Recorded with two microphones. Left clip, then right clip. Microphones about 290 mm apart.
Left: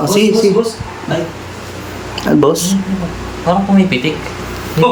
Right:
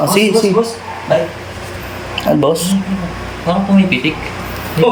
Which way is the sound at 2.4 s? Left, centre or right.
Centre.